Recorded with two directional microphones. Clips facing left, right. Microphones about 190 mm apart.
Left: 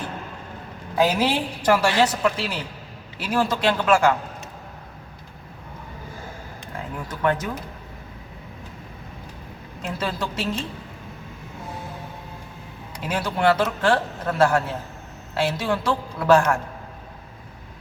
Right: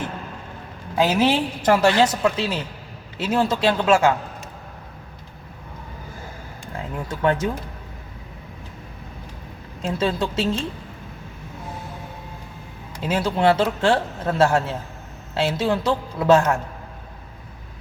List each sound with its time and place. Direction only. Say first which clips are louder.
0.9 s a woman's voice: right 2 dB; 20° right (ahead or behind)
7.1 s a woman's voice: right 3 dB; 25° right (ahead or behind)
9.8 s a woman's voice: right 5 dB; 25° right (ahead or behind)
13.0 s a woman's voice: right 3 dB; 25° right (ahead or behind)